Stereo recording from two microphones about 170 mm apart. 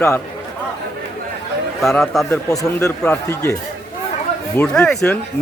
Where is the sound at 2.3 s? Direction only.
20° left (ahead or behind).